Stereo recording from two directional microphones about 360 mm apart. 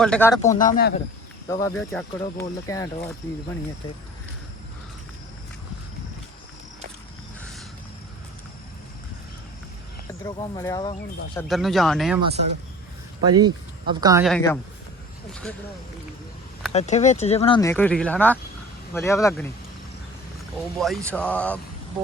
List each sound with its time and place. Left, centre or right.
0.0 s speech: centre
0.5 s speech: left
1.5 s speech: centre
10.2 s speech: centre
11.3 s speech: centre
13.2 s speech: centre
16.7 s speech: centre
20.7 s speech: centre